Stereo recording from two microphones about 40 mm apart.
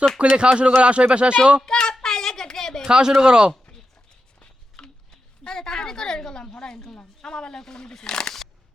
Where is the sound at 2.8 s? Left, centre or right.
Centre.